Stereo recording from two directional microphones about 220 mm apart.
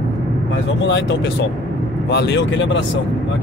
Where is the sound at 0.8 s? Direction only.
55° left (ahead or behind).